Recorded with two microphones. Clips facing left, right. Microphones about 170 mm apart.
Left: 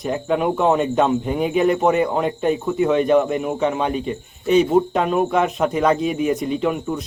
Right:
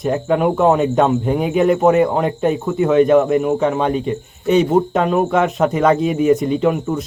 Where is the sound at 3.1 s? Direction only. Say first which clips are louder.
Right 4 dB; 40° right (ahead or behind).